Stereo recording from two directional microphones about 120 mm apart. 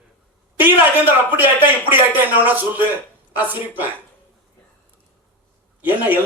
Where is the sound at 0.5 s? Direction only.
15° right (ahead or behind).